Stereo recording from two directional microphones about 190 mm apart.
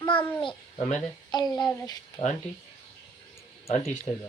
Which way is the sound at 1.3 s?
20° left (ahead or behind).